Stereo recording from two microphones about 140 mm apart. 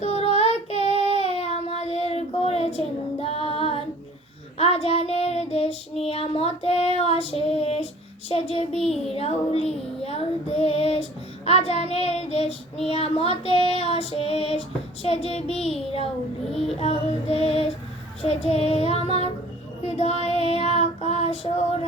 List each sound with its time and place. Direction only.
0.0 s child singing: 50° left (ahead or behind)
3.2 s female singing: 45° left (ahead or behind)
4.5 s child singing: 45° left (ahead or behind)
16.7 s child singing: 45° left (ahead or behind)